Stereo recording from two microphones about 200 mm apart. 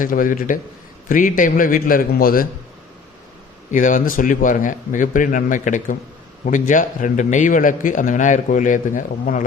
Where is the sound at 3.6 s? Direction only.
40° left (ahead or behind).